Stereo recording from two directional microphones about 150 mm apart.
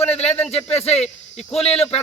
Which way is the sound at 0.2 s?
45° left (ahead or behind).